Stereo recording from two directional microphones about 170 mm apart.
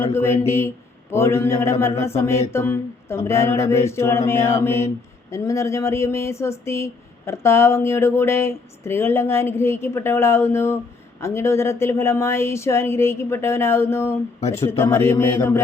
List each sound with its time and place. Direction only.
0.0 s speech: 15° left (ahead or behind)